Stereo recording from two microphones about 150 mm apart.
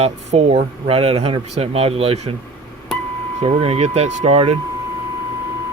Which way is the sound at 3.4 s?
40° right (ahead or behind).